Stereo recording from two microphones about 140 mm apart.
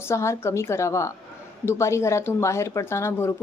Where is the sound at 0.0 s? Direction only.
20° left (ahead or behind).